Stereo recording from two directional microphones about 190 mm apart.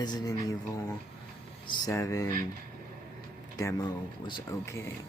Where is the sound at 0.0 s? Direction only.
20° left (ahead or behind).